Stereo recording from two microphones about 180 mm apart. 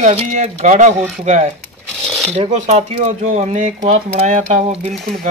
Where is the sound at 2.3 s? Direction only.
40° right (ahead or behind).